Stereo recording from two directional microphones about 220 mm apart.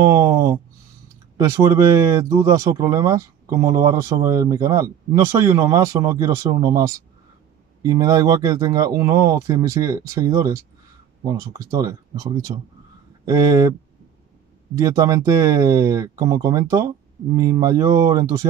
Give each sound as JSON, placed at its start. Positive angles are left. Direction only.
{"t": 0.0, "sound": "speech", "side_deg": -15}
{"t": 14.8, "sound": "speech", "side_deg": -15}